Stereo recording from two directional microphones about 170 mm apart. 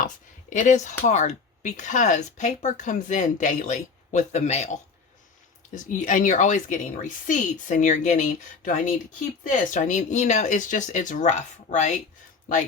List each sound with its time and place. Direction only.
0.5 s speech: 45° left (ahead or behind)